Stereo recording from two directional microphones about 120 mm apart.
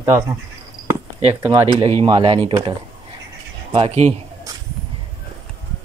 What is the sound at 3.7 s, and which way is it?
Speech, 55° right (ahead or behind).